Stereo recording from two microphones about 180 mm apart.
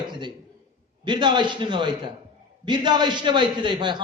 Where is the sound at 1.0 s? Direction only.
25° right (ahead or behind).